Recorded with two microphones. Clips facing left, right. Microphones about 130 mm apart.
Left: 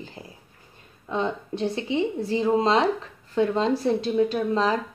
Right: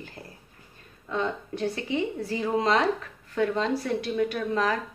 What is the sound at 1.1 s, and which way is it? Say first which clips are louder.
A woman's voice: left 2 dB; 25° left (ahead or behind).